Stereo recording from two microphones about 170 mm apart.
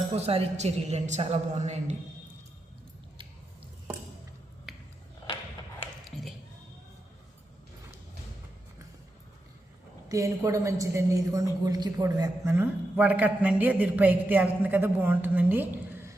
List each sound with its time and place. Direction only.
0.1 s a man's voice: 35° right (ahead or behind)
4.7 s a sound: centre (ahead or behind)
10.1 s a woman's voice: 20° right (ahead or behind)